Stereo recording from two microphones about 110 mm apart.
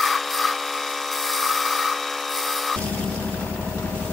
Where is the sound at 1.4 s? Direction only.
Centre (ahead or behind).